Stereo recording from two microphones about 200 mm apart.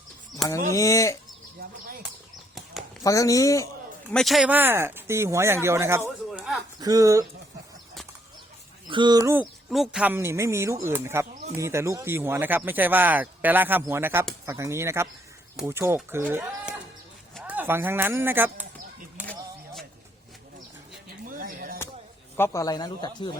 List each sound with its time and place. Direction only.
0.4 s speech: 15° left (ahead or behind)
3.0 s speech: 15° left (ahead or behind)
4.1 s speech: centre (ahead or behind)
6.3 s a sound: centre (ahead or behind)
6.7 s speech: 15° right (ahead or behind)
8.9 s speech: 20° right (ahead or behind)
19.2 s a sound: 5° left (ahead or behind)
21.2 s music: 45° right (ahead or behind)
22.4 s speech: 15° left (ahead or behind)